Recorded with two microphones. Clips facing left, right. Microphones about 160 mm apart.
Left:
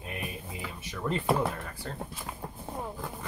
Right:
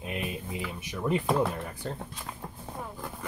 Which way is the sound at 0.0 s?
20° right (ahead or behind).